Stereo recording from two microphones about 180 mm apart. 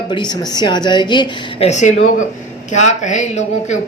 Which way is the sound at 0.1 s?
25° left (ahead or behind).